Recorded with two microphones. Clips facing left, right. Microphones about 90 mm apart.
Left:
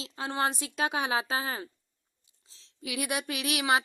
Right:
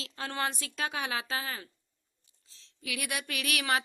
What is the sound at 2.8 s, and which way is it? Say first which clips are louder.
Speech: left 4 dB; 25° left (ahead or behind).